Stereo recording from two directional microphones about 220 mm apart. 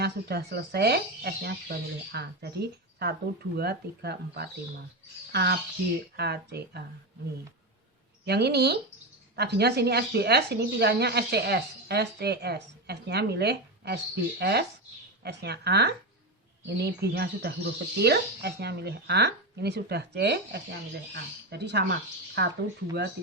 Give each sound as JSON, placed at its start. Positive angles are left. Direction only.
{"t": 0.0, "sound": "speech", "side_deg": -45}
{"t": 8.2, "sound": "speech", "side_deg": -50}